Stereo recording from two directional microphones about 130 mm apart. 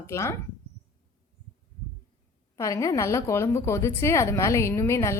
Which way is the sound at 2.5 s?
25° left (ahead or behind).